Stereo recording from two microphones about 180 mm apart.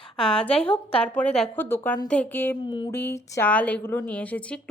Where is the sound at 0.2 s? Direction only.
5° left (ahead or behind).